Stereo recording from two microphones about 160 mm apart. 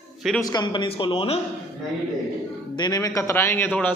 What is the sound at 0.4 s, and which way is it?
Speech, 25° left (ahead or behind).